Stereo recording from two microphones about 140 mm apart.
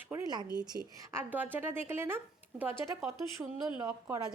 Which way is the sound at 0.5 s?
30° right (ahead or behind).